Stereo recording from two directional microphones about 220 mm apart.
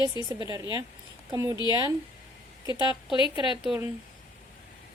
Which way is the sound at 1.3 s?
15° right (ahead or behind).